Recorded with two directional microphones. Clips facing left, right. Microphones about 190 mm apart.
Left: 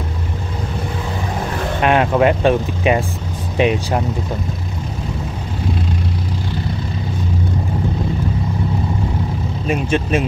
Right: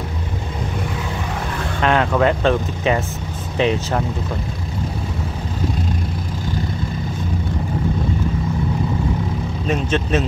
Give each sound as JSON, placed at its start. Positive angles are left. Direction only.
{"t": 1.8, "sound": "speech", "side_deg": 20}
{"t": 9.7, "sound": "speech", "side_deg": 10}